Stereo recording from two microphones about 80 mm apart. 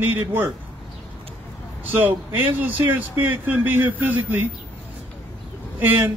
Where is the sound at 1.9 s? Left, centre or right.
Right.